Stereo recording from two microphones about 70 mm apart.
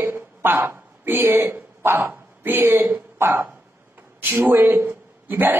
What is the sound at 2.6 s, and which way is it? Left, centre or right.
Speech, right.